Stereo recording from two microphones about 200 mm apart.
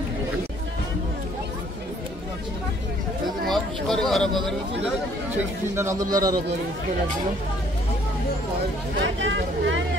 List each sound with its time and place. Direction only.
3.4 s speech: centre (ahead or behind)
5.8 s a man's voice: 15° right (ahead or behind)
9.0 s speech: 70° right (ahead or behind)